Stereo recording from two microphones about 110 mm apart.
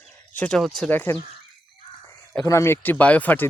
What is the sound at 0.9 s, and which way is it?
Speech, 20° left (ahead or behind).